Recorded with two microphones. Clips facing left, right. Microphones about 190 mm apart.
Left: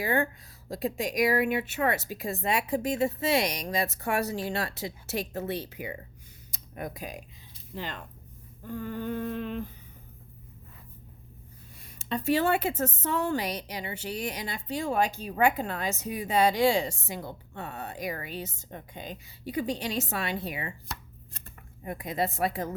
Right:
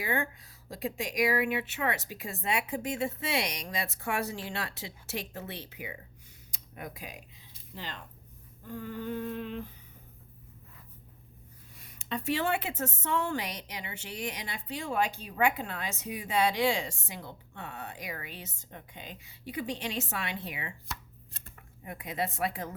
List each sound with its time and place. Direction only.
0.0 s speech: 40° left (ahead or behind)
7.8 s a sound: 50° left (ahead or behind)
11.8 s speech: 30° left (ahead or behind)